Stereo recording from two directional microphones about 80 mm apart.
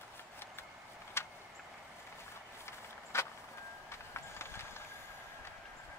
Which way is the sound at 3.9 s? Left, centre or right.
Left.